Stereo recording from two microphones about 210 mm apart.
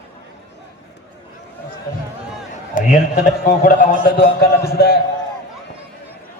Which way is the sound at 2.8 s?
40° left (ahead or behind).